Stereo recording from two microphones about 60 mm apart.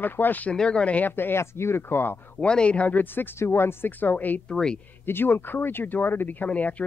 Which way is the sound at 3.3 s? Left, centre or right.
Left.